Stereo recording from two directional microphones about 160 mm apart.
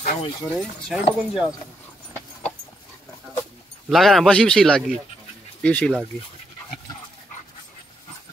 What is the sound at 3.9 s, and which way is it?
Speech, centre (ahead or behind).